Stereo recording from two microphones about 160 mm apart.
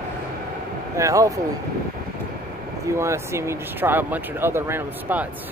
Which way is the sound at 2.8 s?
15° right (ahead or behind).